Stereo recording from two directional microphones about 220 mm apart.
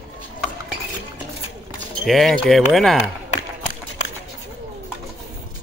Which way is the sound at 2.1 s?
Centre (ahead or behind).